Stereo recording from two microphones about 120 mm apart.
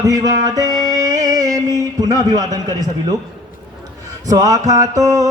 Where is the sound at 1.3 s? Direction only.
30° right (ahead or behind).